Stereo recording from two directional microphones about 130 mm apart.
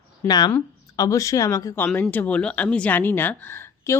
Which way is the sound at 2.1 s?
10° left (ahead or behind).